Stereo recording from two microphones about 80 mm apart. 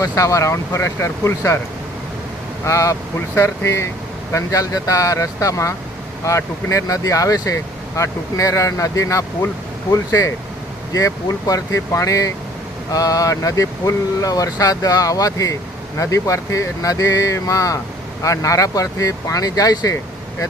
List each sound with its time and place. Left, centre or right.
0.0 s speech: left
2.6 s speech: left